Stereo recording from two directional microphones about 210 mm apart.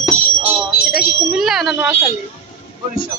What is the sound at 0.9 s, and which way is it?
Speech, centre (ahead or behind).